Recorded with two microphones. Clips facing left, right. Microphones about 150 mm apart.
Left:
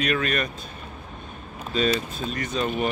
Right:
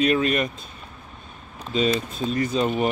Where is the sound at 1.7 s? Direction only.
20° right (ahead or behind).